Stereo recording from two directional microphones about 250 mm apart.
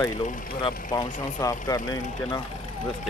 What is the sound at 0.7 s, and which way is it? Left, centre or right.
Speech, centre.